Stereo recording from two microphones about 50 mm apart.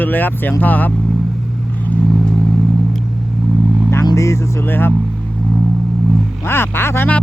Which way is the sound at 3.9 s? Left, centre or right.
Left.